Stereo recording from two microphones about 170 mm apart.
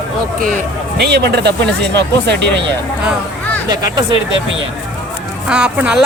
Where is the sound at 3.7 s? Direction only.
25° right (ahead or behind).